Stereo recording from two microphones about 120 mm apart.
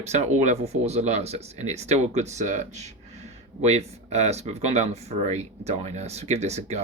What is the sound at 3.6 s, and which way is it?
Speech, 65° right (ahead or behind).